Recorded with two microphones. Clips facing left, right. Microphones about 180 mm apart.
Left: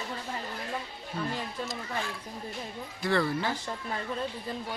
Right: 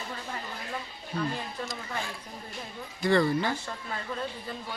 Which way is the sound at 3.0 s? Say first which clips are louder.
Right 4 dB; 5° left (ahead or behind).